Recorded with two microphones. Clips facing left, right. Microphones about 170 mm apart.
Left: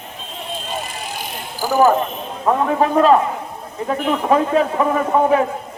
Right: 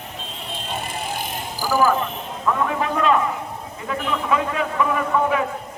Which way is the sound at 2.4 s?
40° left (ahead or behind).